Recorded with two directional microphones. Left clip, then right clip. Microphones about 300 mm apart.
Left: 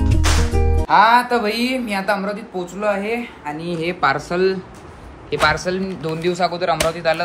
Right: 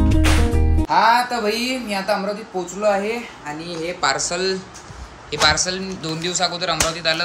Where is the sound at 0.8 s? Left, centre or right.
Centre.